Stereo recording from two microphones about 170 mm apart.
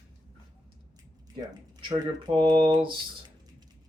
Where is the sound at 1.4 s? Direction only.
25° right (ahead or behind).